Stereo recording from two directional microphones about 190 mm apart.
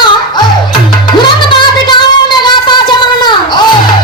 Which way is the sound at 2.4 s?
25° left (ahead or behind).